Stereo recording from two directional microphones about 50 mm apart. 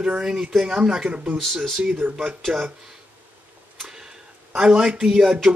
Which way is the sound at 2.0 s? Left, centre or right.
Right.